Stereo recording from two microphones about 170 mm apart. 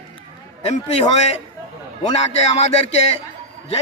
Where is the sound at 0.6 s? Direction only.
40° left (ahead or behind).